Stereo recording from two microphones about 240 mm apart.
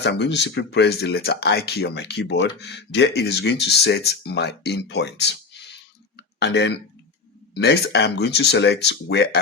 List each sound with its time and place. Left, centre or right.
0.0 s speech: left
6.4 s speech: left